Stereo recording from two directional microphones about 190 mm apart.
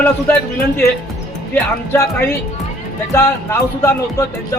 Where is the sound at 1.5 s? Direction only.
10° left (ahead or behind).